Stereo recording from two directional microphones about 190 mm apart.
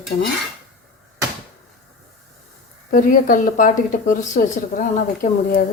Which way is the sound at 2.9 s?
45° left (ahead or behind).